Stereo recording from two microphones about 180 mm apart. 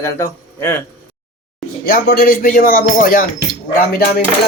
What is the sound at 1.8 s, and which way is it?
Speech, 55° left (ahead or behind).